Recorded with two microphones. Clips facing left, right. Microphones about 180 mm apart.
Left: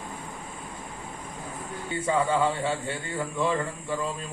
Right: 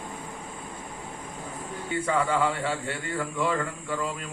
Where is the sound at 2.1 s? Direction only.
25° left (ahead or behind).